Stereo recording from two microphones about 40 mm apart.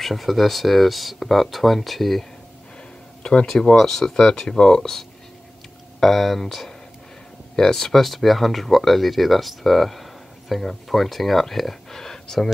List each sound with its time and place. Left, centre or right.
0.0 s speech: centre
3.2 s a sound: left
3.4 s speech: centre
5.9 s speech: centre